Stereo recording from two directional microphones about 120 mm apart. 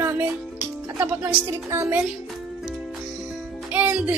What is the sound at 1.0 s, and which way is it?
A woman's voice, 20° right (ahead or behind).